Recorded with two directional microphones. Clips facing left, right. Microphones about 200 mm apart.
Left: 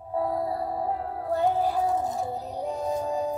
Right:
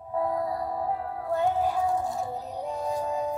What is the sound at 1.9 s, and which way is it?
Music, 20° left (ahead or behind).